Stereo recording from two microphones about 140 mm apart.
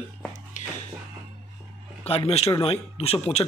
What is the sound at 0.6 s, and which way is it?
Music, 65° left (ahead or behind).